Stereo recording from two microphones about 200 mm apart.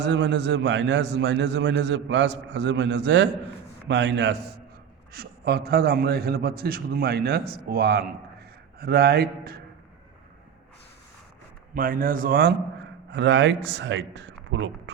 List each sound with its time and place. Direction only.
0.0 s a man's voice: 65° right (ahead or behind)
11.7 s a man's voice: 45° right (ahead or behind)
13.1 s speech: 60° right (ahead or behind)